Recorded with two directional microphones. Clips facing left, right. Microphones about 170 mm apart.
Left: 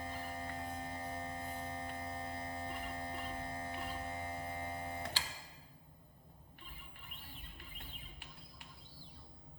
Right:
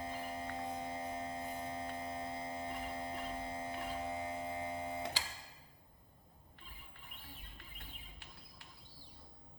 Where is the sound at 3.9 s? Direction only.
15° right (ahead or behind).